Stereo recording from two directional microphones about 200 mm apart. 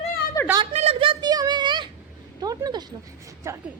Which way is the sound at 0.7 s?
30° right (ahead or behind).